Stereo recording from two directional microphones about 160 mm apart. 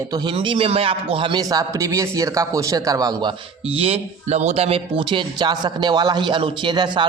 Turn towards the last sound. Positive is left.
turn(degrees=-30)  # may be behind; listen again after turning